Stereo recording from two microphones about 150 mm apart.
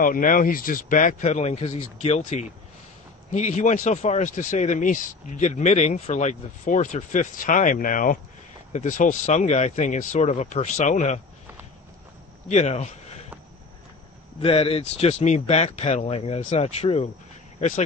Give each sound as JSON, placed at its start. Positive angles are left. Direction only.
{"t": 0.0, "sound": "speech", "side_deg": 65}
{"t": 12.4, "sound": "speech", "side_deg": 50}
{"t": 14.4, "sound": "speech", "side_deg": 40}